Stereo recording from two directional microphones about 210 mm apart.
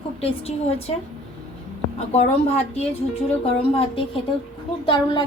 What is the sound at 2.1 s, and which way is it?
A woman's voice, 30° left (ahead or behind).